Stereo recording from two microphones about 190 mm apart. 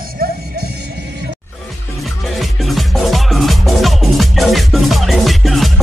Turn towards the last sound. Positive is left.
turn(degrees=0)  # may be behind; listen again after turning